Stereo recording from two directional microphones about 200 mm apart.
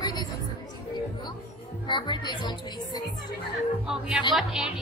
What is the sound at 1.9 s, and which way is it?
Speech, 20° left (ahead or behind).